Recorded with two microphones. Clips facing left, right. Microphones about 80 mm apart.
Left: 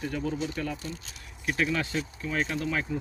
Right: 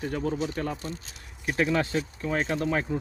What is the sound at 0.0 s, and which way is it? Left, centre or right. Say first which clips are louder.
Speech: right 2 dB; right.